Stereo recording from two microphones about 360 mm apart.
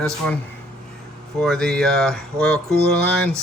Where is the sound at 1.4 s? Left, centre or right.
Centre.